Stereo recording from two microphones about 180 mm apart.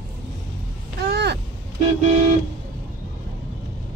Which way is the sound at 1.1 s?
65° right (ahead or behind).